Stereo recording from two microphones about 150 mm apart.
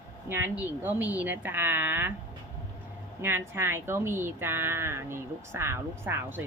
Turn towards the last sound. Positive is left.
turn(degrees=-15)  # may be behind; listen again after turning